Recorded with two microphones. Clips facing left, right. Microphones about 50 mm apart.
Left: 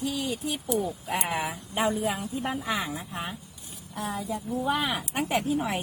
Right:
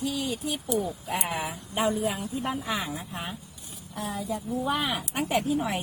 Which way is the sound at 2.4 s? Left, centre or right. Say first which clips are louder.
Even; centre.